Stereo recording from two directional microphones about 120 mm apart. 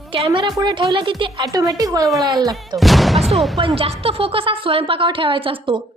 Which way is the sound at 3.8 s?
55° right (ahead or behind).